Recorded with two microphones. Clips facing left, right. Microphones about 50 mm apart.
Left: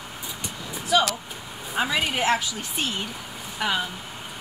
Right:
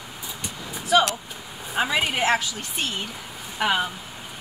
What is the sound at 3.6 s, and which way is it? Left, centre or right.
Speech, centre.